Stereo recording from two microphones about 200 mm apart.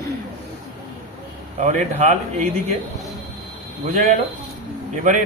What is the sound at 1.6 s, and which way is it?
Speech, 35° right (ahead or behind).